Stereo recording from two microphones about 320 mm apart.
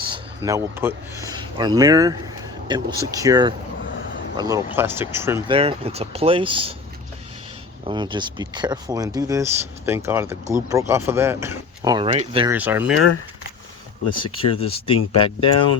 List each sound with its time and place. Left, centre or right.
0.1 s speech: centre
7.9 s speech: centre
12.5 s speech: centre
14.3 s speech: centre